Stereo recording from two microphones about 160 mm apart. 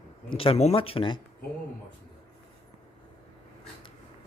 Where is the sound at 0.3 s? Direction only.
35° left (ahead or behind).